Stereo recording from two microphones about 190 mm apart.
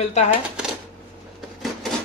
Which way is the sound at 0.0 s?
35° left (ahead or behind).